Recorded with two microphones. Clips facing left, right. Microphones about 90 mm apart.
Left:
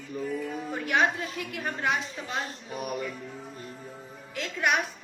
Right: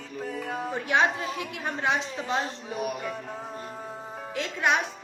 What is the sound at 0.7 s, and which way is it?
A woman's voice, 25° right (ahead or behind).